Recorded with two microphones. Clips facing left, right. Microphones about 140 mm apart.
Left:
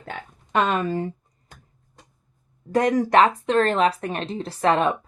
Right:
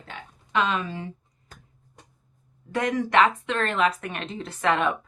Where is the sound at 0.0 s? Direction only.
50° left (ahead or behind).